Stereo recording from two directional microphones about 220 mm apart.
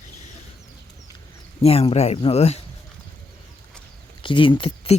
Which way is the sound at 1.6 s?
25° left (ahead or behind).